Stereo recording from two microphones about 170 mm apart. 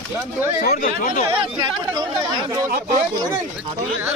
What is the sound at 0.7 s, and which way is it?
Speech, 55° left (ahead or behind).